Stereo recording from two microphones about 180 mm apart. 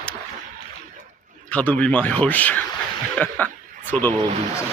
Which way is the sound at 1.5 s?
10° left (ahead or behind).